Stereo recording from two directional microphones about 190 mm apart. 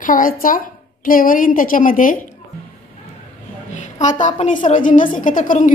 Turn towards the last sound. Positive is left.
turn(degrees=45)  # may be behind; listen again after turning